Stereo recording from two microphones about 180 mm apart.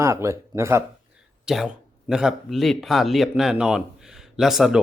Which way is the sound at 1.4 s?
Centre (ahead or behind).